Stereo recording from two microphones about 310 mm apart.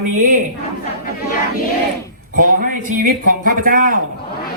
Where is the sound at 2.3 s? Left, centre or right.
Right.